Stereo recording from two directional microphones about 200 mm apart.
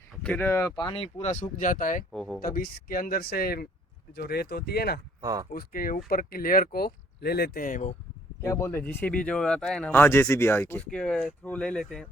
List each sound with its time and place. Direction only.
0.2 s speech: 10° left (ahead or behind)
0.9 s speech: 30° left (ahead or behind)
2.1 s speech: 5° left (ahead or behind)
2.5 s speech: 50° left (ahead or behind)
5.2 s speech: 20° right (ahead or behind)
5.5 s speech: 45° left (ahead or behind)
8.4 s speech: 15° left (ahead or behind)